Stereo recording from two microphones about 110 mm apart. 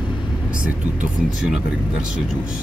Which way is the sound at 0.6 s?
10° right (ahead or behind).